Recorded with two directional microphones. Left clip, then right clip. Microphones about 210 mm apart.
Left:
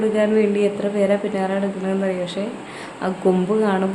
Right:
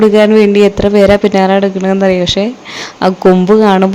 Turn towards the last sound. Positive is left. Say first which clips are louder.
# right 12 dB
turn(degrees=-45)  # may be behind; listen again after turning